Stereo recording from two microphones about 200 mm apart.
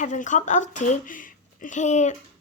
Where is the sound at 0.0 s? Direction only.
40° left (ahead or behind).